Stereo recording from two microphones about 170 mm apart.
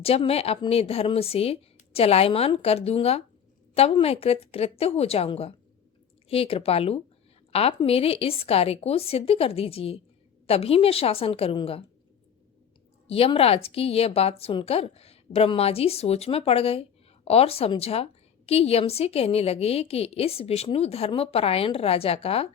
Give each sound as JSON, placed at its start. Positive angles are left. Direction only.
{"t": 0.3, "sound": "a woman's voice", "side_deg": 35}
{"t": 13.1, "sound": "a woman's voice", "side_deg": 35}